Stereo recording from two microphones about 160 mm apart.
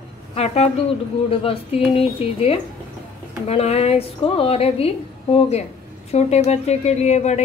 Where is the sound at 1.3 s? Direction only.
35° left (ahead or behind).